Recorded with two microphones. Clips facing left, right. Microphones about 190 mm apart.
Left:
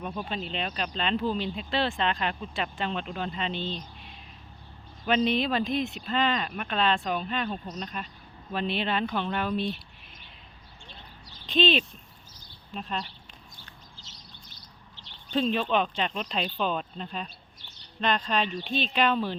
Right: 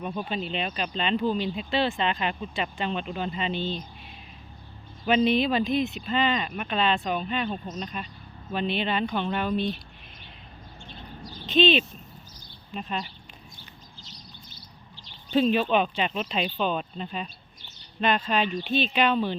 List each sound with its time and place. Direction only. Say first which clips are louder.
0.0 s speech: right 3 dB; centre (ahead or behind)
11.4 s speech: right 3 dB; centre (ahead or behind)
14.0 s chirp: right 4 dB; 20° left (ahead or behind)
15.3 s speech: right 4 dB; 5° right (ahead or behind)